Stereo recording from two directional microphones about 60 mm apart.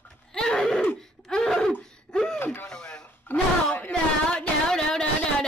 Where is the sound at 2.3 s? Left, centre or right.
Left.